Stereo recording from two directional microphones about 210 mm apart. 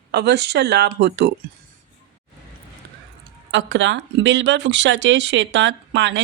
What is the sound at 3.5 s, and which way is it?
Speech, 60° right (ahead or behind).